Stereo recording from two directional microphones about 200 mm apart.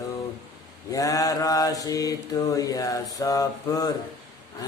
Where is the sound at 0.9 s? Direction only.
15° left (ahead or behind).